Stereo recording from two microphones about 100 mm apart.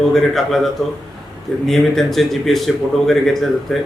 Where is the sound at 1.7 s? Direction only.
Centre (ahead or behind).